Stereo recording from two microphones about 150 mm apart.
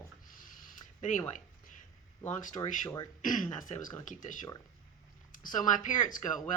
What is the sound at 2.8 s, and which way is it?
Speech, 25° left (ahead or behind).